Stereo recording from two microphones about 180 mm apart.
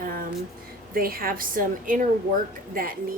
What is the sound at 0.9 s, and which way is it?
A woman's voice, 55° right (ahead or behind).